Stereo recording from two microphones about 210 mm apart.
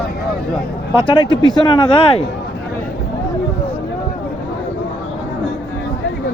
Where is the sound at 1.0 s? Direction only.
25° left (ahead or behind).